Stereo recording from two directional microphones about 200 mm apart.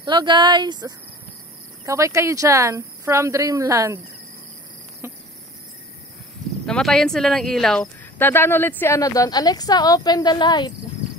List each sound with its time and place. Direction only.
0.0 s a woman's voice: 20° right (ahead or behind)
5.0 s cricket: 10° right (ahead or behind)
6.6 s speech: 5° left (ahead or behind); by 10.7 s 20° left (ahead or behind)